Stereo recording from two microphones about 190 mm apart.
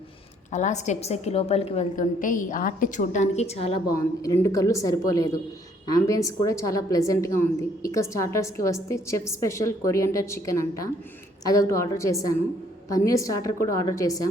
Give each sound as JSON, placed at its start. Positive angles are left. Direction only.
{"t": 0.5, "sound": "a woman's voice", "side_deg": 40}
{"t": 3.8, "sound": "a woman's voice", "side_deg": 20}